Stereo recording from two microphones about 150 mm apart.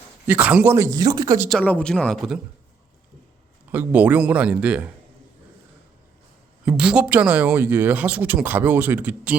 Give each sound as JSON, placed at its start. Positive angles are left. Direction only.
{"t": 0.3, "sound": "speech", "side_deg": -10}
{"t": 1.5, "sound": "speech", "side_deg": 5}
{"t": 3.7, "sound": "speech", "side_deg": -10}
{"t": 6.7, "sound": "speech", "side_deg": -5}